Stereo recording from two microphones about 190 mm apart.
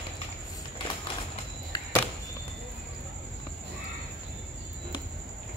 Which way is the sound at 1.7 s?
20° left (ahead or behind).